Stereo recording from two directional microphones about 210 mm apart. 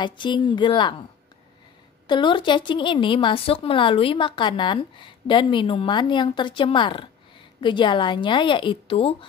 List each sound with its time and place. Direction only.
0.0 s speech: 20° left (ahead or behind)
2.0 s speech: 20° left (ahead or behind)